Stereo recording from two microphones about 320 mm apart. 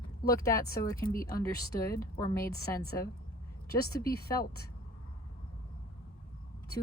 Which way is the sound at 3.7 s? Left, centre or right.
Left.